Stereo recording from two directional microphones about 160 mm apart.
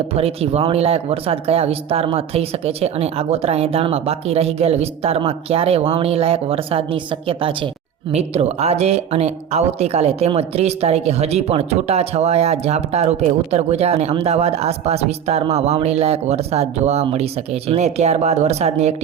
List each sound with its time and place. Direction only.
0.1 s speech: 40° right (ahead or behind)